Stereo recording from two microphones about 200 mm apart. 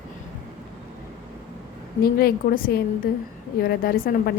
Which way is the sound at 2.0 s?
50° left (ahead or behind).